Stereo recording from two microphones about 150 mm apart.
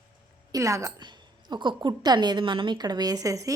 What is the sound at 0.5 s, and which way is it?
A woman's voice, 20° right (ahead or behind).